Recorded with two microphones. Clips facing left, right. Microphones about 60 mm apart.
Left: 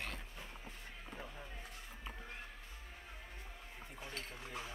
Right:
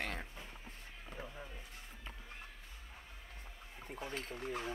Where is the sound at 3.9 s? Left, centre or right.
Right.